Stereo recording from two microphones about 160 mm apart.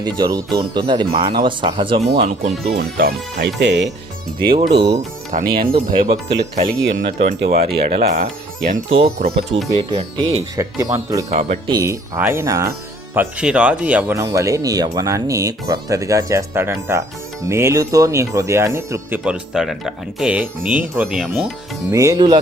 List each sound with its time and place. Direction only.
0.0 s speech: 25° right (ahead or behind)
2.7 s speech: 80° right
4.9 s speech: 55° right (ahead or behind); by 7.7 s 75° right (ahead or behind)
7.9 s speech: 55° right (ahead or behind)
8.9 s speech: 40° right (ahead or behind)
10.6 s speech: 20° right (ahead or behind)
11.3 s speech: 40° right (ahead or behind)
11.7 s speech: 20° right (ahead or behind)
13.1 s speech: 10° right (ahead or behind)
19.2 s speech: 5° right (ahead or behind)
21.9 s speech: 20° right (ahead or behind)